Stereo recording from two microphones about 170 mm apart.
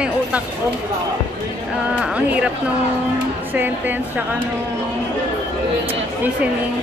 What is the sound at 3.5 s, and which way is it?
Speech, 10° right (ahead or behind).